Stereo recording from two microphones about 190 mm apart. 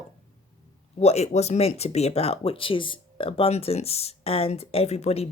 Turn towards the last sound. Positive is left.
turn(degrees=35)  # may be behind; listen again after turning